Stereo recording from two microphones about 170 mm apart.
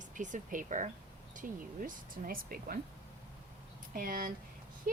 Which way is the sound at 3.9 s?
55° right (ahead or behind).